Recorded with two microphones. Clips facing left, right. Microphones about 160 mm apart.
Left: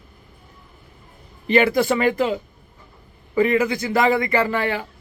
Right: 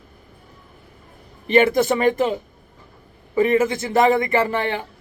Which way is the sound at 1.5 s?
20° right (ahead or behind).